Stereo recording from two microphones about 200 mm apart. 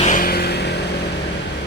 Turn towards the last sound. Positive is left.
turn(degrees=55)  # may be behind; listen again after turning